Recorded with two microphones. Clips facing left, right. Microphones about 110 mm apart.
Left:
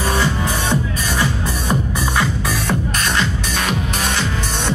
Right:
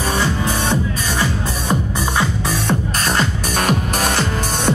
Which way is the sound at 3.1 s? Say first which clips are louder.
Right 3 dB; 45° right (ahead or behind).